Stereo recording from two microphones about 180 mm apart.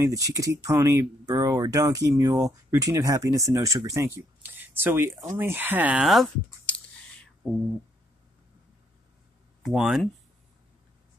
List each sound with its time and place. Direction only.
0.0 s speech: 20° right (ahead or behind); by 7.2 s 5° left (ahead or behind)
9.6 s speech: centre (ahead or behind)